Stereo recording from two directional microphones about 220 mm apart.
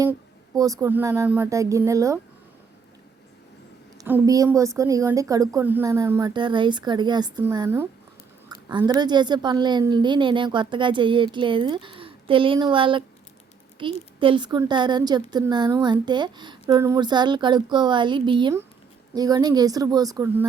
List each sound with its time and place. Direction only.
0.0 s a woman's voice: 15° right (ahead or behind)
4.0 s a woman's voice: 10° right (ahead or behind)